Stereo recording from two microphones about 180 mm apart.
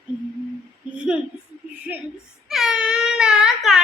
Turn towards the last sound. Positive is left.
turn(degrees=-5)  # may be behind; listen again after turning